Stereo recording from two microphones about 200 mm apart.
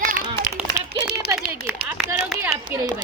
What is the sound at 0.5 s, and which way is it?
Run, 15° right (ahead or behind).